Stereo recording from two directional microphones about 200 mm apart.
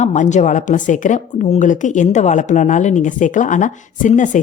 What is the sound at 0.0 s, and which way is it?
Speech, 35° left (ahead or behind).